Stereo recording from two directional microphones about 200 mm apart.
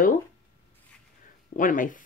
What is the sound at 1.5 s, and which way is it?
Speech, 40° left (ahead or behind).